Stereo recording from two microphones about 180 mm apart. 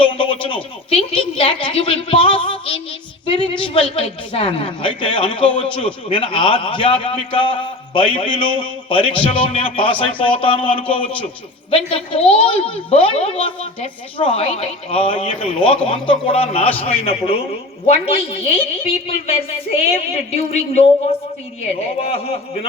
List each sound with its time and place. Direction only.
0.0 s a sound: 25° left (ahead or behind)
0.4 s a woman's voice: 30° left (ahead or behind)
21.9 s a woman's voice: 35° left (ahead or behind)